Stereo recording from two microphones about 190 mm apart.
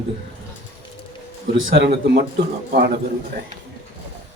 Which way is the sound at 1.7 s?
55° right (ahead or behind).